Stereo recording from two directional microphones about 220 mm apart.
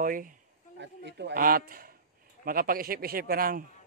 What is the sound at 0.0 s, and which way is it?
Speech, 40° right (ahead or behind).